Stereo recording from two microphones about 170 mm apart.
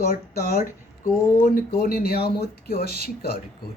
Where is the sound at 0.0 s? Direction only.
60° left (ahead or behind).